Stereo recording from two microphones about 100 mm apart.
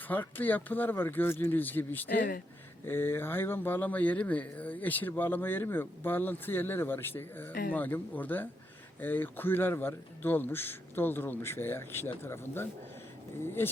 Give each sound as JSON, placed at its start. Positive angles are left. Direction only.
{"t": 0.1, "sound": "speech", "side_deg": 20}